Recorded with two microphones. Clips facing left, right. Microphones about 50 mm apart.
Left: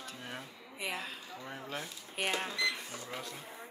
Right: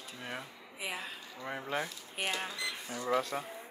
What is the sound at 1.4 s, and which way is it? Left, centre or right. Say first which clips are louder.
Speech: right 6 dB; right.